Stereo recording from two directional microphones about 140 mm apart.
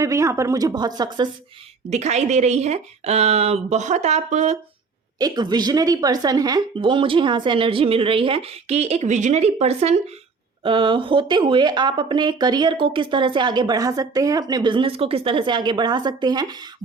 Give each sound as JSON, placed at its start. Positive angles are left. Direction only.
{"t": 0.0, "sound": "speech", "side_deg": -20}
{"t": 1.9, "sound": "speech", "side_deg": -55}
{"t": 5.2, "sound": "speech", "side_deg": -30}
{"t": 10.6, "sound": "speech", "side_deg": -35}